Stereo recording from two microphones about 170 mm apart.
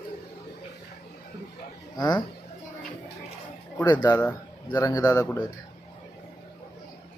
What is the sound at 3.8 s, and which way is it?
Speech, 25° left (ahead or behind).